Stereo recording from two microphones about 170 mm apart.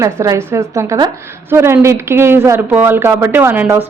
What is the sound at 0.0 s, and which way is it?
Speech, 15° right (ahead or behind).